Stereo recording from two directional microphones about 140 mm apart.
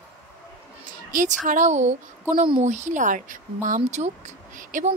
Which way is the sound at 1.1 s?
65° right (ahead or behind).